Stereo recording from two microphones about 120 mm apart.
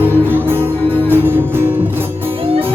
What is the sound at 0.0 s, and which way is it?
Music, 15° right (ahead or behind).